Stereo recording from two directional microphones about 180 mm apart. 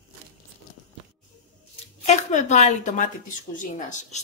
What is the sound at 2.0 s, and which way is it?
Speech, 40° left (ahead or behind).